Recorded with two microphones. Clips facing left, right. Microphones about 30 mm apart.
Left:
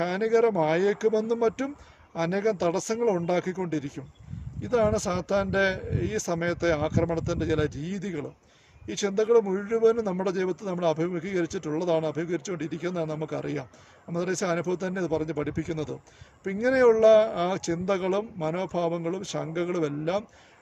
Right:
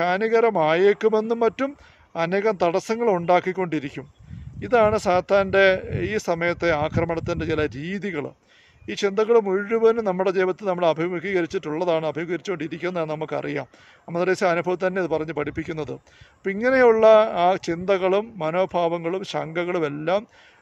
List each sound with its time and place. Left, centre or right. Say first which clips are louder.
0.0 s a man's voice: right 4 dB; right